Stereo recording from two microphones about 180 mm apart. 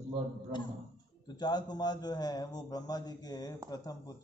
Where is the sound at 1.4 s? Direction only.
25° left (ahead or behind).